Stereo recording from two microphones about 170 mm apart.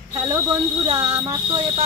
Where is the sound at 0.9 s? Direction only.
20° right (ahead or behind).